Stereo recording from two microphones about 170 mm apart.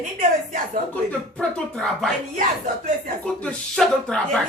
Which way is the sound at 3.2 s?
5° left (ahead or behind).